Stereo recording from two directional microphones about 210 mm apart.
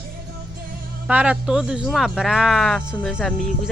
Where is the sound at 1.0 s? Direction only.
5° right (ahead or behind).